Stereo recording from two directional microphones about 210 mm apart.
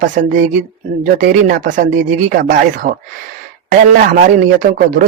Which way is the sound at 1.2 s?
45° right (ahead or behind).